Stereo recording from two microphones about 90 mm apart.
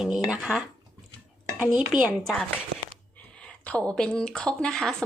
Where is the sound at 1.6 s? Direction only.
20° right (ahead or behind).